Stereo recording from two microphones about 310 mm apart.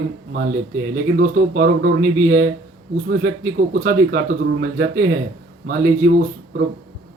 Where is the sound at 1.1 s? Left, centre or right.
Right.